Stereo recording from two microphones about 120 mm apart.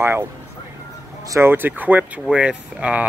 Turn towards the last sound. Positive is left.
turn(degrees=-10)  # may be behind; listen again after turning